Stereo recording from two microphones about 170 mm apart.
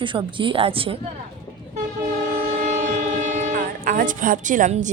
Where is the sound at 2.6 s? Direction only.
45° right (ahead or behind).